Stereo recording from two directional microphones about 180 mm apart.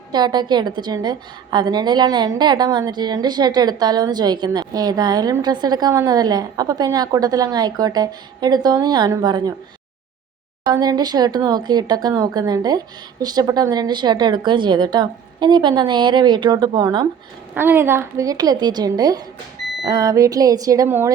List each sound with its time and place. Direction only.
0.1 s a woman's voice: 25° right (ahead or behind)
10.6 s a woman's voice: 25° right (ahead or behind)
17.5 s a woman's voice: 10° right (ahead or behind)